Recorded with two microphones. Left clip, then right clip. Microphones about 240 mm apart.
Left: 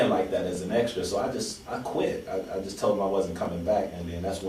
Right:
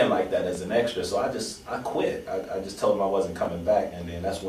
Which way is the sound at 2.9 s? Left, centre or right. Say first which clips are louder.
Right 2 dB; centre.